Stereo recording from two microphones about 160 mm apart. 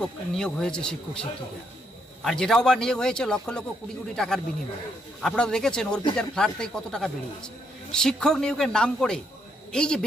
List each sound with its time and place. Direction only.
0.0 s a man's voice: 5° left (ahead or behind)
2.2 s a man's voice: 5° left (ahead or behind)